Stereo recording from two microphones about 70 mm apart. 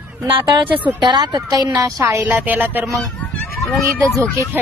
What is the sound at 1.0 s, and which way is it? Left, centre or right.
Speech, right.